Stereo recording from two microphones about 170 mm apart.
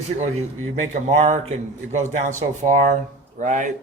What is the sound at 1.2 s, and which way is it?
A man's voice, 40° right (ahead or behind).